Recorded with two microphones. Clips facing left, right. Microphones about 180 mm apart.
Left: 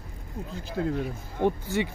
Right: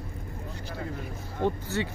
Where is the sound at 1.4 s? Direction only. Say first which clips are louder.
Left 3 dB; 15° left (ahead or behind).